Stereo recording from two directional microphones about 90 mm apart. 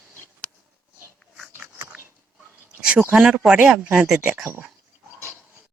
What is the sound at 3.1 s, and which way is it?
Speech, 5° right (ahead or behind).